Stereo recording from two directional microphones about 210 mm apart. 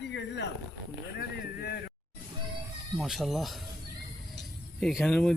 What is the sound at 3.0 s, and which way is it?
Speech, centre (ahead or behind).